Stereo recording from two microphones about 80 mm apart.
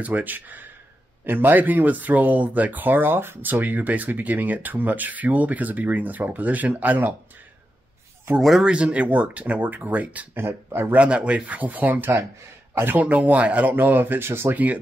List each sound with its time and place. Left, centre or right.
0.0 s speech: right
8.4 s a man's voice: centre
8.7 s speech: centre
11.0 s speech: centre